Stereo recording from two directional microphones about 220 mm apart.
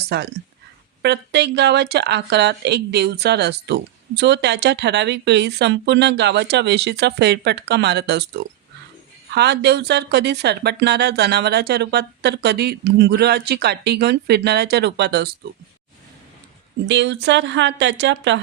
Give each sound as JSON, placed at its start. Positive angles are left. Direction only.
{"t": 0.1, "sound": "speech", "side_deg": -50}
{"t": 16.9, "sound": "speech", "side_deg": -55}